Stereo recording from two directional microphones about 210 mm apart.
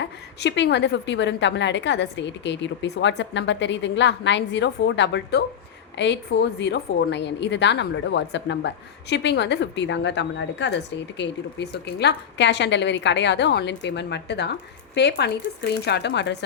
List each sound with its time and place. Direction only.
0.0 s a woman's voice: 55° left (ahead or behind)